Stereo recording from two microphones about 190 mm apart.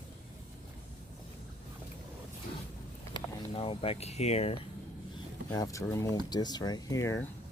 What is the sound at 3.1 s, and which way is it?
Speech, 30° left (ahead or behind).